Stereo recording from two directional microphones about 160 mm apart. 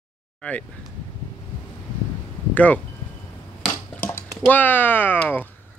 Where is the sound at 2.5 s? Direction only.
10° left (ahead or behind).